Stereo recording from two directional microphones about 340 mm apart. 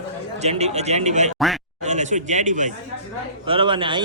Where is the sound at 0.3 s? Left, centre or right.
Centre.